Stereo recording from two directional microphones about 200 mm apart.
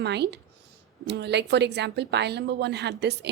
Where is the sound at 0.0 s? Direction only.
60° right (ahead or behind).